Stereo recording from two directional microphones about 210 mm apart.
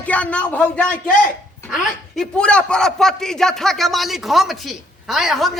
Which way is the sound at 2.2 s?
5° left (ahead or behind).